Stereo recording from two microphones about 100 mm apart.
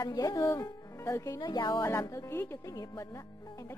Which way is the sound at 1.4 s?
50° left (ahead or behind).